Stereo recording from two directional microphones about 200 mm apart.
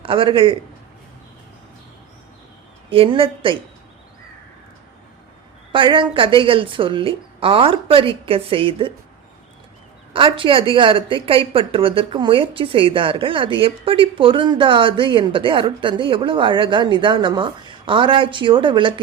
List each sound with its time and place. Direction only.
0.0 s a woman's voice: 25° right (ahead or behind)
2.9 s a woman's voice: 25° right (ahead or behind)
5.7 s a woman's voice: 25° right (ahead or behind)
10.1 s a woman's voice: 25° right (ahead or behind)